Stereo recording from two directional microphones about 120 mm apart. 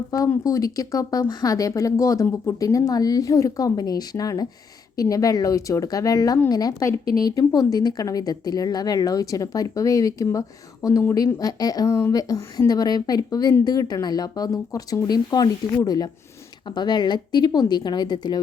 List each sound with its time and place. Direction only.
0.1 s a woman's voice: 30° left (ahead or behind)